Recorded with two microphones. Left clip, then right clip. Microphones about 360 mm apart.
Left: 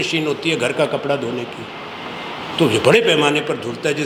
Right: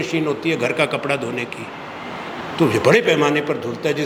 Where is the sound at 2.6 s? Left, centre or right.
Centre.